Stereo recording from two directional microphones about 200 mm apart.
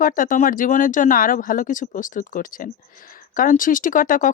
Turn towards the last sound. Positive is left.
turn(degrees=40)  # may be behind; listen again after turning